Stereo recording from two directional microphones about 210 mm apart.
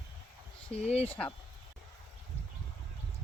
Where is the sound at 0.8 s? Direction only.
30° left (ahead or behind).